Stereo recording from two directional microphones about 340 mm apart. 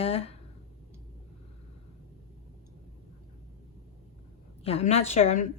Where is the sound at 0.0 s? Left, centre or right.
Centre.